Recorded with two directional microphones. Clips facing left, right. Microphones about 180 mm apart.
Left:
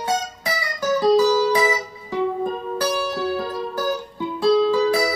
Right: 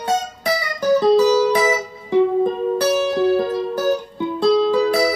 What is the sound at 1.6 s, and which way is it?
Music, 25° right (ahead or behind).